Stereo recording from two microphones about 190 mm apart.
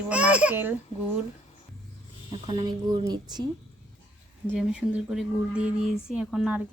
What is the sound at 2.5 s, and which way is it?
Speech, 20° right (ahead or behind).